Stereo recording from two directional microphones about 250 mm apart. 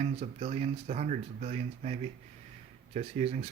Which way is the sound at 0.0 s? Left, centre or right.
Right.